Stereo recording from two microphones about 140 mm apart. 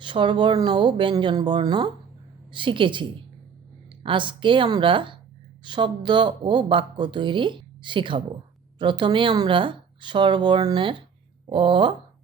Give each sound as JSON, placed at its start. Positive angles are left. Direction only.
{"t": 0.0, "sound": "speech", "side_deg": -35}